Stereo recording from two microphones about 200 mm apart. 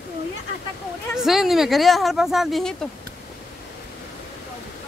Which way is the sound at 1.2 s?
Centre (ahead or behind).